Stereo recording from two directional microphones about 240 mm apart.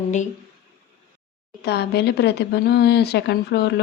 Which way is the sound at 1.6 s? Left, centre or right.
Left.